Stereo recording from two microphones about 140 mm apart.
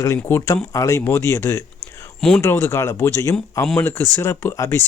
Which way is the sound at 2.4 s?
15° left (ahead or behind).